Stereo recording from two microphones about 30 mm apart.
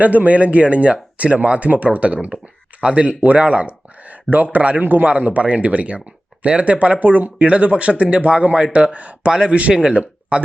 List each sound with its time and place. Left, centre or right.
0.0 s speech: right
4.8 s a man's voice: right
5.0 s speech: right